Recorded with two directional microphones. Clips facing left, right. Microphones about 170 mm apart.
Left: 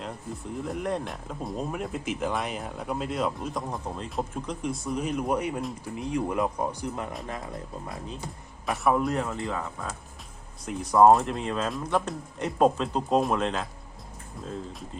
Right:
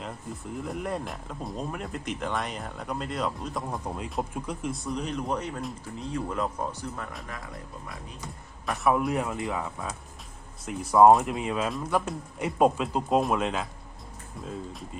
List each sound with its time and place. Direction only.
0.6 s speech: centre (ahead or behind); by 8.3 s 25° left (ahead or behind)
8.6 s speech: centre (ahead or behind)